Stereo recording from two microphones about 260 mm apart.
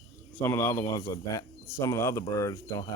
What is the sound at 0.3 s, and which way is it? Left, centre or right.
Speech, centre.